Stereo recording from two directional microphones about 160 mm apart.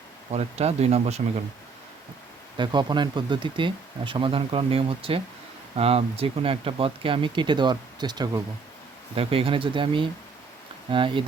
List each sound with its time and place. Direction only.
0.3 s speech: 40° right (ahead or behind)
2.6 s speech: 30° right (ahead or behind)